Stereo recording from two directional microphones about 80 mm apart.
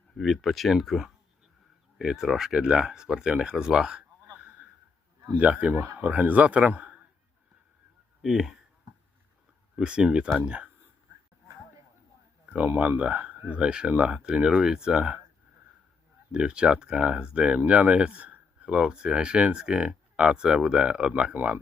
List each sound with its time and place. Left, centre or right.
0.2 s speech: centre
5.4 s speech: centre
8.2 s speech: centre
9.7 s speech: centre
12.5 s speech: centre
16.3 s speech: centre